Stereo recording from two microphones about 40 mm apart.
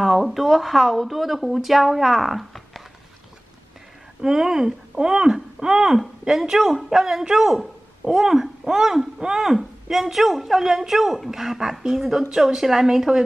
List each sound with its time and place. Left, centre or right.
0.0 s speech: centre
4.2 s a woman's voice: centre
6.6 s a woman's voice: centre
9.5 s a woman's voice: centre